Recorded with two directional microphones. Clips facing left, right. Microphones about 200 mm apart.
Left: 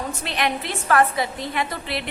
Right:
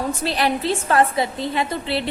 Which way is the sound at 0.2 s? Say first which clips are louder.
Right 2 dB; 35° right (ahead or behind).